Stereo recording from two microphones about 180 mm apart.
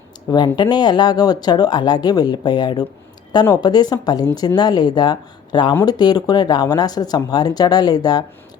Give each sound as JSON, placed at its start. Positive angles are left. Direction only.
{"t": 0.3, "sound": "speech", "side_deg": 25}